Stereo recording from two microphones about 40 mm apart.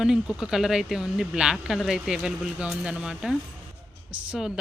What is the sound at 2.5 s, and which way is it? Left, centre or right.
Speech, right.